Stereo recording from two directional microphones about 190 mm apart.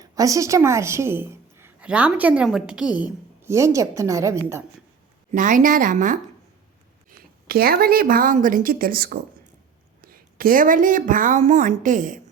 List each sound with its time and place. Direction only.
0.0 s a woman's voice: 20° right (ahead or behind)
5.3 s a woman's voice: 45° right (ahead or behind)